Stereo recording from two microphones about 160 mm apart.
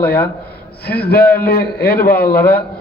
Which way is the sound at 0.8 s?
80° left.